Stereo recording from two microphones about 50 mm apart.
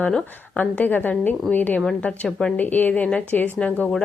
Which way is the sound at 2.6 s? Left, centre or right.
Left.